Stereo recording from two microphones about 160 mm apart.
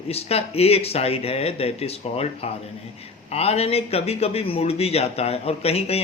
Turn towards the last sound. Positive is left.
turn(degrees=40)  # may be behind; listen again after turning